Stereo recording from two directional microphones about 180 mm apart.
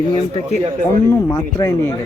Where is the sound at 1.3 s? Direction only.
20° left (ahead or behind).